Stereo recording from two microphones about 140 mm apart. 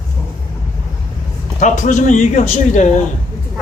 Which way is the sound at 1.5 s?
65° left (ahead or behind).